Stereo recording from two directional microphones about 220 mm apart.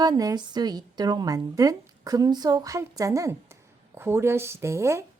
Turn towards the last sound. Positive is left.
turn(degrees=-10)  # may be behind; listen again after turning